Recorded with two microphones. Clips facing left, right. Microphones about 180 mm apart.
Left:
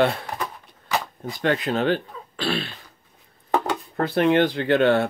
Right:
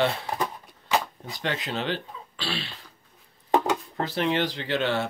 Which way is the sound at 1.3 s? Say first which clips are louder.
Left 8 dB; 50° left (ahead or behind).